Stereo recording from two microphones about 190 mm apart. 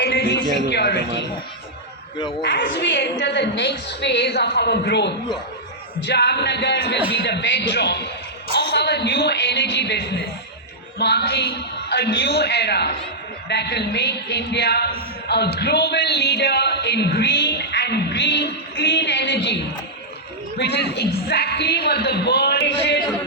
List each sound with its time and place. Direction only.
0.0 s a sound: 60° left (ahead or behind)
0.7 s a man's voice: 60° left (ahead or behind)
2.4 s a man's voice: 65° left (ahead or behind)